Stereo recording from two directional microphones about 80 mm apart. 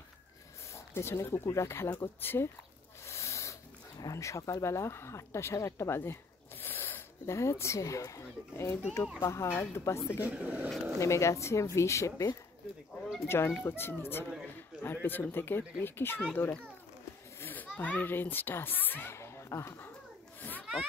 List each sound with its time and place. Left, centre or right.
0.7 s speech: left
3.1 s a sound: left
4.0 s speech: left
10.2 s speech: centre
11.0 s speech: left
13.3 s a man's voice: left
16.4 s speech: left
17.4 s speech: left
19.1 s a sound: left